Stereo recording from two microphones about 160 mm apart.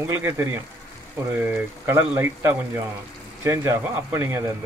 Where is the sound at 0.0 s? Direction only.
15° right (ahead or behind).